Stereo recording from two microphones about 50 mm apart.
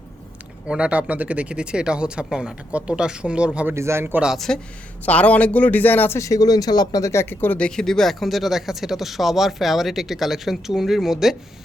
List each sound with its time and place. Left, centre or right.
0.7 s speech: right
3.8 s speech: right
4.4 s speech: centre
5.0 s speech: left
6.1 s speech: left
7.0 s speech: left
7.3 s speech: left
7.8 s speech: centre